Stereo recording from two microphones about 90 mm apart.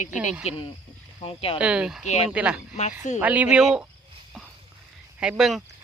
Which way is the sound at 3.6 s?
5° right (ahead or behind).